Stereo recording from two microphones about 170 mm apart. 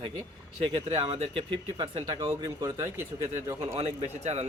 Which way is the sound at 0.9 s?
35° right (ahead or behind).